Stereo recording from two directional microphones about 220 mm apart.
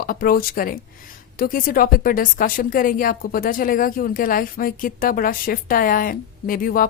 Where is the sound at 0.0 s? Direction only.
40° left (ahead or behind).